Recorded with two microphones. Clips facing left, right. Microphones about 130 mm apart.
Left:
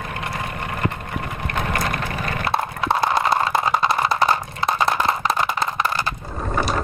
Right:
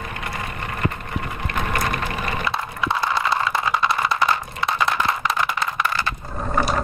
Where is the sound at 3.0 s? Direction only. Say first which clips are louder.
Left 3 dB; 50° left (ahead or behind).